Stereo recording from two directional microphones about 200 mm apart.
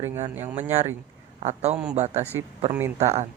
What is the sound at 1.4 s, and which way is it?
Speech, 35° right (ahead or behind).